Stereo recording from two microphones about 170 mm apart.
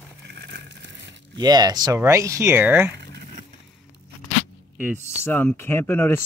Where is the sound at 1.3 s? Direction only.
25° right (ahead or behind).